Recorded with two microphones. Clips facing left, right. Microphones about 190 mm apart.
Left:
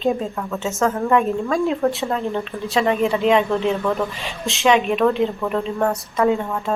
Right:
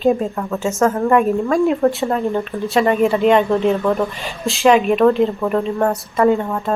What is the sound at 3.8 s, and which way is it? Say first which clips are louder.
Speech: right 4 dB; 15° right (ahead or behind).